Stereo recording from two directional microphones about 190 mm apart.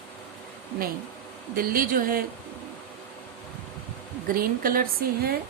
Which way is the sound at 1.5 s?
50° right (ahead or behind).